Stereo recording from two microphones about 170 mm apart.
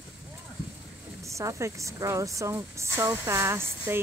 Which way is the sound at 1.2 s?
15° right (ahead or behind).